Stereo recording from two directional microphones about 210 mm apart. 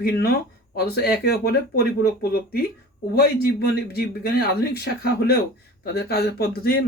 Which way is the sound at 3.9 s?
50° left (ahead or behind).